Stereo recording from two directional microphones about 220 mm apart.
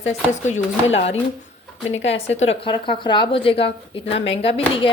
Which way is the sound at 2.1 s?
30° left (ahead or behind).